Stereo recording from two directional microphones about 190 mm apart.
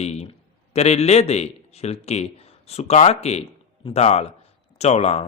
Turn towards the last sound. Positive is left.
turn(degrees=35)  # may be behind; listen again after turning